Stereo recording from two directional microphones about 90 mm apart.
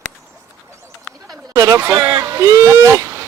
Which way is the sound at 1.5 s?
35° right (ahead or behind).